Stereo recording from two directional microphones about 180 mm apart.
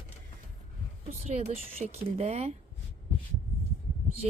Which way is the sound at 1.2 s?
35° right (ahead or behind).